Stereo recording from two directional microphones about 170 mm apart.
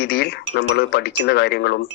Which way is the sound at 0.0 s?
70° left (ahead or behind).